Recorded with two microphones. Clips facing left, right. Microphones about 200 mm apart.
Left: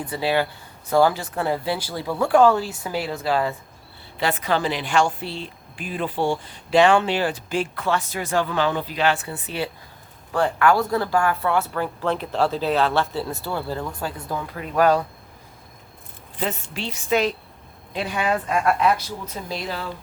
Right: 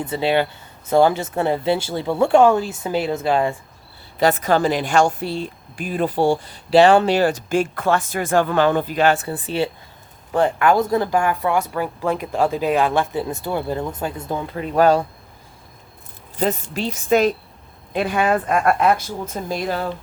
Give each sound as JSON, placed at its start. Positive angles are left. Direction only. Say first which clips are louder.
{"t": 0.0, "sound": "speech", "louder": "right 3 dB", "side_deg": -25}
{"t": 4.2, "sound": "a woman's voice", "louder": "right 6 dB", "side_deg": -45}
{"t": 10.3, "sound": "speech", "louder": "right 2 dB", "side_deg": -20}
{"t": 16.4, "sound": "a woman's voice", "louder": "right 6 dB", "side_deg": -40}